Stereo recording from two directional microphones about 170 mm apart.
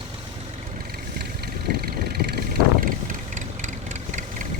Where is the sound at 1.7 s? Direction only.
70° right (ahead or behind).